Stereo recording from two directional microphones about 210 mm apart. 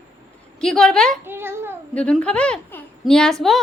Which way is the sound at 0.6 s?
Centre (ahead or behind).